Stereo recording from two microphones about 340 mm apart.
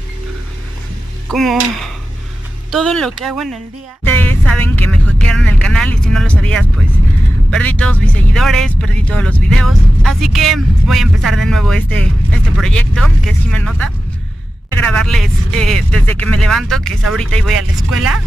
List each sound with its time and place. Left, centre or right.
1.3 s speech: centre
4.0 s music: centre
7.5 s speech: centre